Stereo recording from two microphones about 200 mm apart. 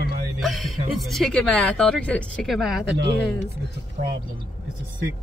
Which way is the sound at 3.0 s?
60° right (ahead or behind).